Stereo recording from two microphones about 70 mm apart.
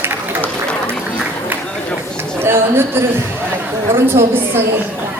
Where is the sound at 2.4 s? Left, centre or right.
Right.